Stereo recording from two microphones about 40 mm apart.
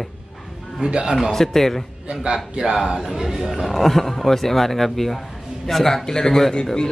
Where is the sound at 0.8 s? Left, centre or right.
Centre.